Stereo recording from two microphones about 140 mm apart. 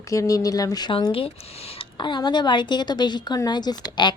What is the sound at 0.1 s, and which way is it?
Speech, 25° left (ahead or behind).